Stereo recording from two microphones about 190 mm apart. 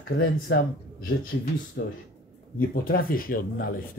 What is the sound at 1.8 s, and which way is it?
Speech, 50° left (ahead or behind).